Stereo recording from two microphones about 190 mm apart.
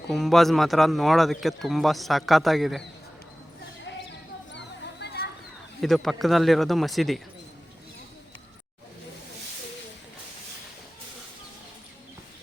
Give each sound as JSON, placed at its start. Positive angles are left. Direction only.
{"t": 0.1, "sound": "speech", "side_deg": 0}
{"t": 4.5, "sound": "a sound", "side_deg": 60}
{"t": 5.8, "sound": "speech", "side_deg": 0}